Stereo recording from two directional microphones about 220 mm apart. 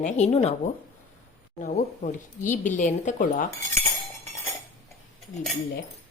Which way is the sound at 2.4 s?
35° left (ahead or behind).